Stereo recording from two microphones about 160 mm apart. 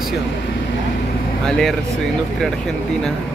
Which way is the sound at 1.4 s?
Centre (ahead or behind).